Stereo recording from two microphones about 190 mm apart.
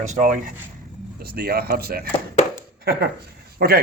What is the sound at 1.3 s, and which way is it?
Speech, 55° right (ahead or behind).